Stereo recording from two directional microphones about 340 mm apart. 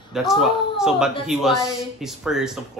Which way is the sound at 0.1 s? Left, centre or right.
Centre.